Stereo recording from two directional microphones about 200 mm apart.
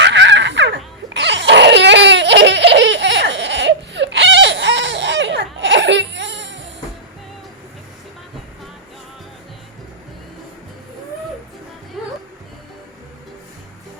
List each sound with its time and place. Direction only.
0.0 s crying: 60° right (ahead or behind)
12.0 s music: centre (ahead or behind)